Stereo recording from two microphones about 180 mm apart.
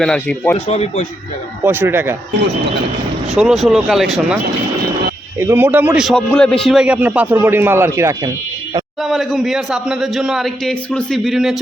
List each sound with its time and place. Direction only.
0.0 s a man's voice: 5° left (ahead or behind)
0.7 s speech: 35° left (ahead or behind)
1.6 s a man's voice: 10° right (ahead or behind)
3.2 s a man's voice: centre (ahead or behind)
5.4 s a man's voice: 10° right (ahead or behind)
9.0 s a man's voice: centre (ahead or behind)